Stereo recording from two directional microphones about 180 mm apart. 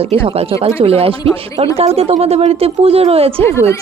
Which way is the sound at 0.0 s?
30° right (ahead or behind).